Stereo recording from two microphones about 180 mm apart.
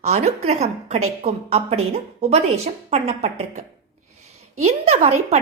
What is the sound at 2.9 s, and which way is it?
Speech, 35° right (ahead or behind).